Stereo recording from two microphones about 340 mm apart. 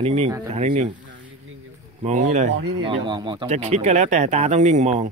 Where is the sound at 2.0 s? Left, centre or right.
Right.